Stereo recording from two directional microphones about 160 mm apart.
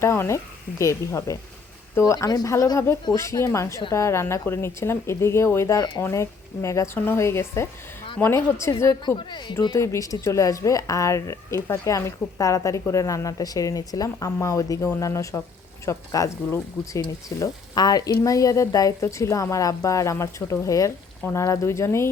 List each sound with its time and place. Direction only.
0.0 s a woman's voice: 15° left (ahead or behind)